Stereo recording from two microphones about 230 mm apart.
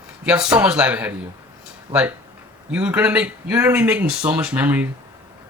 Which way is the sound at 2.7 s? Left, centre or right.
Centre.